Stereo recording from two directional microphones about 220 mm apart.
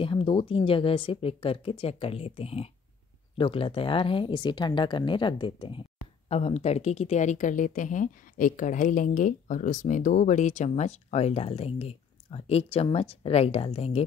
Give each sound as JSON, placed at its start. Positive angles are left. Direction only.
{"t": 0.0, "sound": "speech", "side_deg": 20}